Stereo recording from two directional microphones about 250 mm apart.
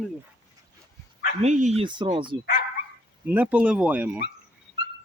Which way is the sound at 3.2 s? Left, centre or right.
Centre.